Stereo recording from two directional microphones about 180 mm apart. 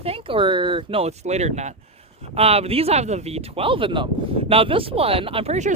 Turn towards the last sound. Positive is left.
turn(degrees=-40)  # may be behind; listen again after turning